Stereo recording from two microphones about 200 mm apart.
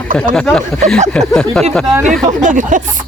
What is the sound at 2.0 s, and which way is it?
Speech, 40° right (ahead or behind).